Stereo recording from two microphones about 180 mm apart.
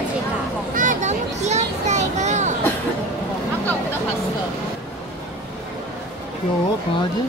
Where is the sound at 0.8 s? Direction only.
45° right (ahead or behind).